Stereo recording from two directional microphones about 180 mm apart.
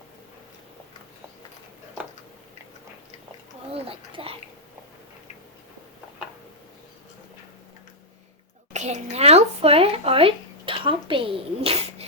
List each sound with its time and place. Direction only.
3.7 s a child's voice: 30° right (ahead or behind)
8.7 s speech: 40° right (ahead or behind)